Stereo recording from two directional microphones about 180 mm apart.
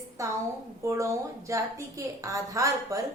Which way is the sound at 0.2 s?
15° right (ahead or behind).